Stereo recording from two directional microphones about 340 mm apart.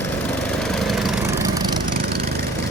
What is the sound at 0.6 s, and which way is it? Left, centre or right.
Lawn mower, centre.